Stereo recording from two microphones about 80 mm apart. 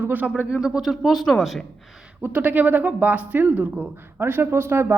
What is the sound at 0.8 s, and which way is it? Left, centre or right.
Speech, centre.